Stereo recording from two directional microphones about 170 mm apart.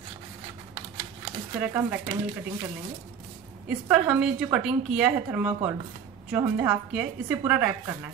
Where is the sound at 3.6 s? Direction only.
5° right (ahead or behind).